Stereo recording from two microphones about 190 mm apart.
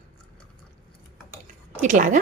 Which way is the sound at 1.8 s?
40° right (ahead or behind).